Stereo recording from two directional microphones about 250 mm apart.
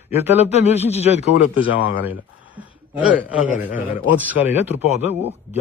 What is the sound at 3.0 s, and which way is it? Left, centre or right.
A man's voice, centre.